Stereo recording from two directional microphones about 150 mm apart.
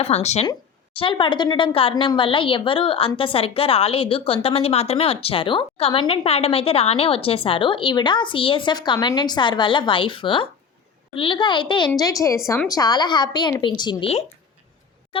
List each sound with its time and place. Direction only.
0.0 s speech: 45° left (ahead or behind)
0.9 s a woman's voice: 35° left (ahead or behind)
15.1 s a sound: 35° left (ahead or behind)